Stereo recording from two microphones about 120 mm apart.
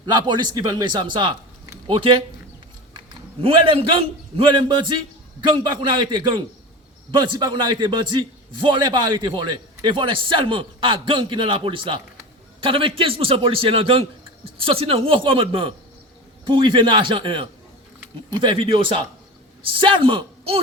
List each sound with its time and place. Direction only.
0.0 s a man's voice: 40° right (ahead or behind)
3.4 s a man's voice: 50° right (ahead or behind)